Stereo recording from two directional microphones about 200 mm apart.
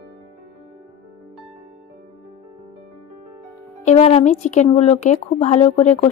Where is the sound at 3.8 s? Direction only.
30° left (ahead or behind).